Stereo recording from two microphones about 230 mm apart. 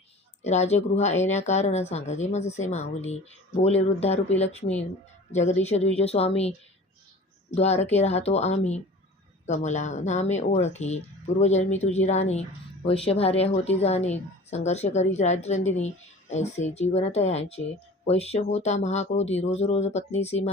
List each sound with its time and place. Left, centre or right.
0.4 s speech: left
5.3 s speech: left
7.5 s speech: left